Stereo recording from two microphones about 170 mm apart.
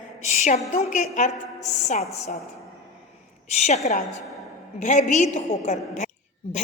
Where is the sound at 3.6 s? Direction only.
40° left (ahead or behind).